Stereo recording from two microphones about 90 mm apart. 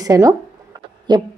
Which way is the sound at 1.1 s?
55° right (ahead or behind).